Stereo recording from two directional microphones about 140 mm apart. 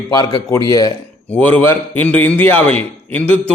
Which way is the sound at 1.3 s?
10° left (ahead or behind).